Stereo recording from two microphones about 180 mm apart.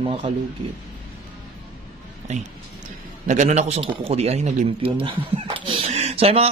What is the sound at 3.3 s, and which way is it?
A man's voice, 40° right (ahead or behind).